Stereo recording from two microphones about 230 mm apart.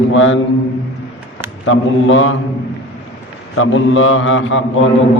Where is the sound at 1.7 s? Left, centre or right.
Left.